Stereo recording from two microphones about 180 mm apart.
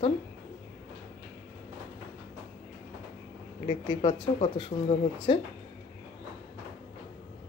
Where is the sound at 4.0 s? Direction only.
30° left (ahead or behind).